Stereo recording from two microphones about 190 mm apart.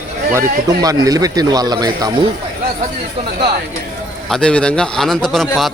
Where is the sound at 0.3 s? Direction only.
20° right (ahead or behind).